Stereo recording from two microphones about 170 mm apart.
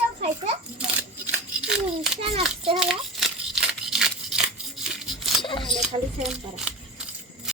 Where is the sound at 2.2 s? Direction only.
35° right (ahead or behind).